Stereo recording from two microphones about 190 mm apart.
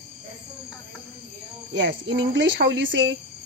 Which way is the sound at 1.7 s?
70° right (ahead or behind).